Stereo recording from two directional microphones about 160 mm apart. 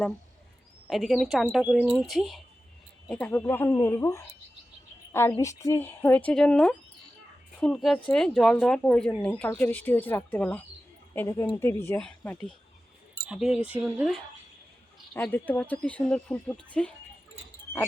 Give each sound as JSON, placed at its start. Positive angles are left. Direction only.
{"t": 0.9, "sound": "speech", "side_deg": 0}
{"t": 13.2, "sound": "speech", "side_deg": -5}
{"t": 15.1, "sound": "speech", "side_deg": 10}